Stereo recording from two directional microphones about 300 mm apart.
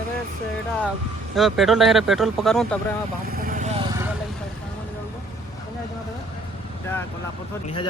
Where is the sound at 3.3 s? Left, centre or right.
Right.